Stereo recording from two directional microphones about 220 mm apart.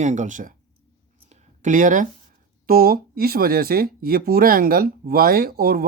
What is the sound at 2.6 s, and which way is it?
Speech, 45° right (ahead or behind).